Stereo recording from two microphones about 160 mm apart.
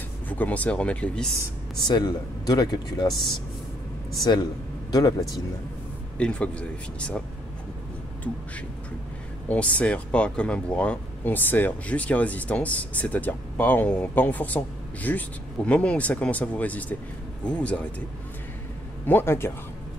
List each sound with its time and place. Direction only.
0.3 s speech: 10° left (ahead or behind)
1.9 s speech: 25° left (ahead or behind)
4.2 s speech: 25° left (ahead or behind)
6.1 s speech: 5° left (ahead or behind)
9.5 s speech: 10° left (ahead or behind)
19.0 s speech: 15° left (ahead or behind)